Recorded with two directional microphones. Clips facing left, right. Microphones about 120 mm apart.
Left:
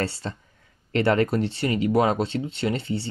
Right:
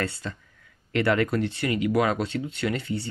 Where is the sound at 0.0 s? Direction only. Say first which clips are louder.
Left 2 dB; 30° left (ahead or behind).